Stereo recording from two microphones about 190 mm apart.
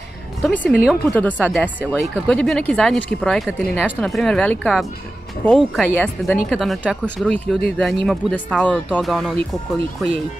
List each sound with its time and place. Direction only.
0.4 s speech: centre (ahead or behind)